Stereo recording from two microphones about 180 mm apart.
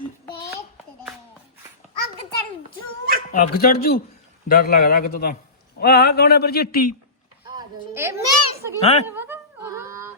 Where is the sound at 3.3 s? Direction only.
55° left (ahead or behind).